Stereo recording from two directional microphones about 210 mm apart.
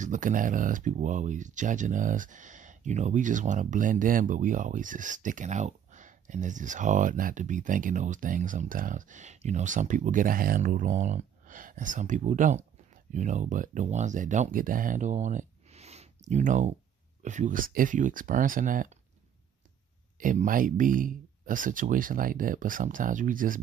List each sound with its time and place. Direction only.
0.0 s speech: 40° right (ahead or behind)
20.2 s speech: 40° right (ahead or behind)